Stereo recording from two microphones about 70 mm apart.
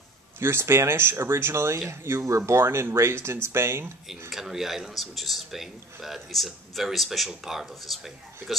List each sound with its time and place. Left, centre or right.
0.4 s speech: right
4.3 s speech: centre